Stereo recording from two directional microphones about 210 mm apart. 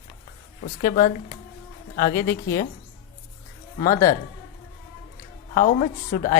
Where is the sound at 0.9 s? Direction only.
40° left (ahead or behind).